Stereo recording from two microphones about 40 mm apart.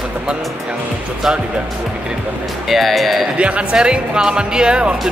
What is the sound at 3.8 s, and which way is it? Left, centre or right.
Speech, centre.